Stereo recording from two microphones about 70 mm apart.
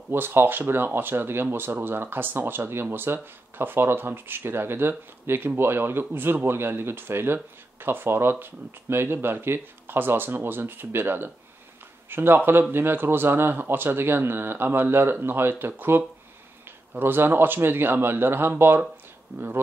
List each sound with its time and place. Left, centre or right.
0.1 s speech: right